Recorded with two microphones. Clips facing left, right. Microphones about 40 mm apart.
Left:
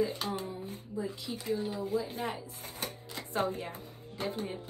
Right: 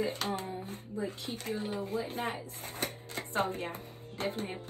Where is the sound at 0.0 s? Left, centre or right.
Right.